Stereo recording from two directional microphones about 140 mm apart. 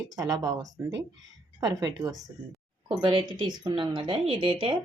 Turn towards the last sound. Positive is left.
turn(degrees=-40)  # may be behind; listen again after turning